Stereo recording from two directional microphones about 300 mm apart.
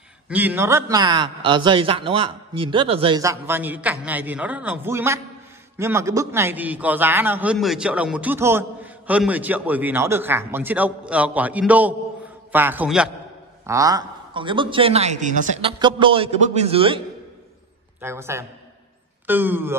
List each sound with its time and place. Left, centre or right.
0.3 s a man's voice: centre
18.0 s a man's voice: centre